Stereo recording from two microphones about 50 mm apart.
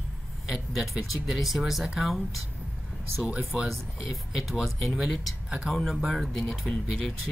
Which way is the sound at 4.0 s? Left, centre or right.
Centre.